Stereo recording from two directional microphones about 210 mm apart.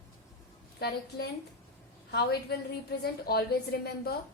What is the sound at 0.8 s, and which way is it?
A woman's voice, 50° left (ahead or behind).